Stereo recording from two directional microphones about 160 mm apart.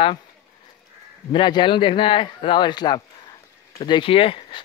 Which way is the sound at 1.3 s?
30° left (ahead or behind).